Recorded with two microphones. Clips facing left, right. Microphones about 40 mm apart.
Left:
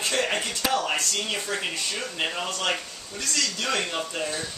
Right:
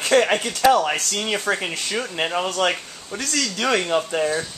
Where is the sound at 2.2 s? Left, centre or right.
Right.